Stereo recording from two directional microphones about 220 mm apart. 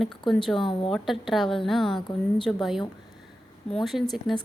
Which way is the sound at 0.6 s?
25° left (ahead or behind).